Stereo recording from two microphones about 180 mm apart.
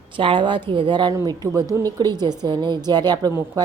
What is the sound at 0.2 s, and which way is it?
A woman's voice, 30° right (ahead or behind).